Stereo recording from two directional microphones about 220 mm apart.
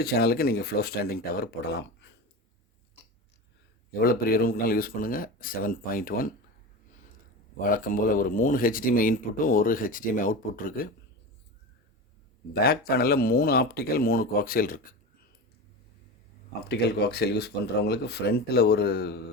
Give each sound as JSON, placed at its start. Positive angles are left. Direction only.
{"t": 0.0, "sound": "speech", "side_deg": 45}
{"t": 3.9, "sound": "speech", "side_deg": 40}
{"t": 7.6, "sound": "speech", "side_deg": 40}
{"t": 12.6, "sound": "speech", "side_deg": 45}
{"t": 16.6, "sound": "speech", "side_deg": 45}